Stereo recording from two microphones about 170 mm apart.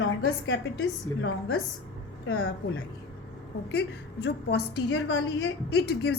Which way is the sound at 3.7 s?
80° left.